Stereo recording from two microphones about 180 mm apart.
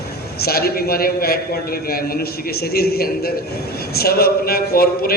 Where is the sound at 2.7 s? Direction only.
60° left (ahead or behind).